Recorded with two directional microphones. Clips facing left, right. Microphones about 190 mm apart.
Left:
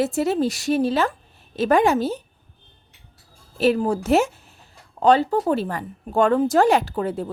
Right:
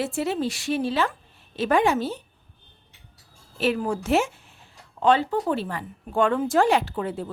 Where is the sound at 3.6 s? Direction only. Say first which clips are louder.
Left 5 dB; 35° left (ahead or behind).